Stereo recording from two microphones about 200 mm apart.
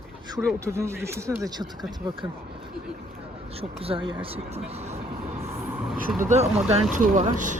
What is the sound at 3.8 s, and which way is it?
Speech, 25° right (ahead or behind).